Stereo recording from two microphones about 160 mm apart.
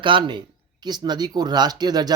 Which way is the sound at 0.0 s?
30° right (ahead or behind).